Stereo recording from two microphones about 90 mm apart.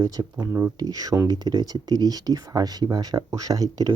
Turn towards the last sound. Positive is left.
turn(degrees=-45)  # may be behind; listen again after turning